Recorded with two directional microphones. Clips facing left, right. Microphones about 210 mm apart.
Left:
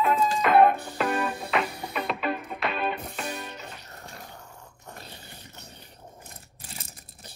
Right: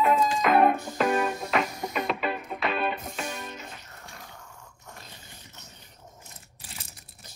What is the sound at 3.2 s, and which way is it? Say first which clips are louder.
Music: even; 35° left (ahead or behind).